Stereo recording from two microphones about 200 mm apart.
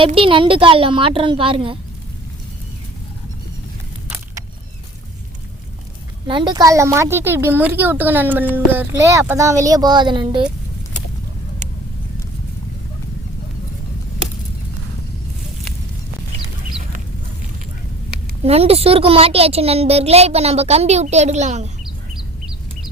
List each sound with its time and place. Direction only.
0.0 s a woman's voice: 25° right (ahead or behind)
6.2 s speech: 20° right (ahead or behind)
18.4 s a woman's voice: 30° right (ahead or behind)